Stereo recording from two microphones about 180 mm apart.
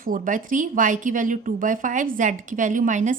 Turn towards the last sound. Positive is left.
turn(degrees=-45)  # may be behind; listen again after turning